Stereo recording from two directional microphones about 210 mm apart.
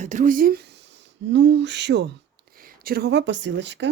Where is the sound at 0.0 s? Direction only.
35° right (ahead or behind); by 2.1 s 55° right (ahead or behind).